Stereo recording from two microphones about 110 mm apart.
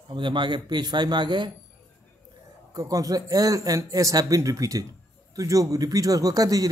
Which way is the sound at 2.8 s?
30° right (ahead or behind).